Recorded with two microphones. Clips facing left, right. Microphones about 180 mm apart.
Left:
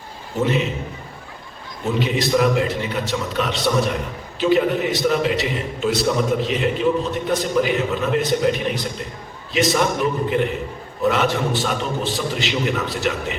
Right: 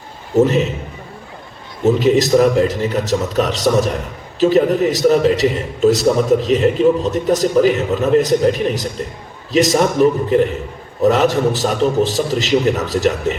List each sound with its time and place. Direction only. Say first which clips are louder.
0.3 s a man's voice: right 7 dB; 40° right (ahead or behind)
1.8 s a man's voice: right 9 dB; 40° right (ahead or behind)